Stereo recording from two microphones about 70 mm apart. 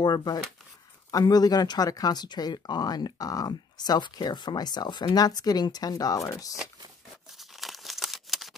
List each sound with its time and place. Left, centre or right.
0.0 s speech: left
7.2 s tearing: centre